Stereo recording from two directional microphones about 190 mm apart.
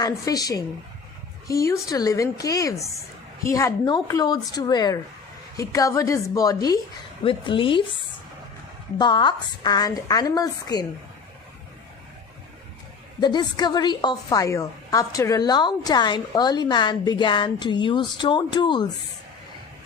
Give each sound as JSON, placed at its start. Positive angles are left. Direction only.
{"t": 0.0, "sound": "a woman's voice", "side_deg": 20}
{"t": 9.0, "sound": "a woman's voice", "side_deg": 25}
{"t": 13.1, "sound": "a woman's voice", "side_deg": 25}